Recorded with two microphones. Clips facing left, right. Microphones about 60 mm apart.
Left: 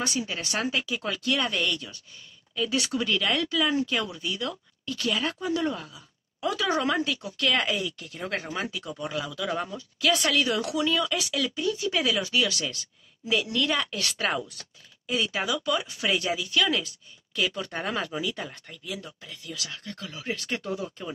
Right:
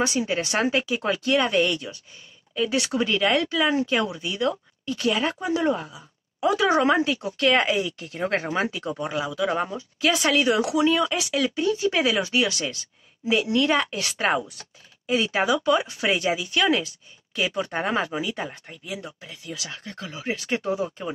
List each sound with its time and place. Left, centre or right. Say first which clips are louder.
0.0 s speech: right 6 dB; right